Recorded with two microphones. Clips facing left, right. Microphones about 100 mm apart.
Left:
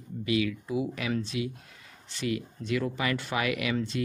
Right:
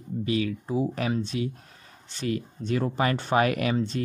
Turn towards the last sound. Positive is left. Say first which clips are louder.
# right 6 dB
turn(degrees=-40)  # may be behind; listen again after turning